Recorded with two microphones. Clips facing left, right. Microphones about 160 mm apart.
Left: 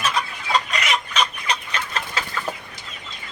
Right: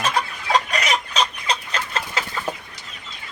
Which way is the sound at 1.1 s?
30° right (ahead or behind).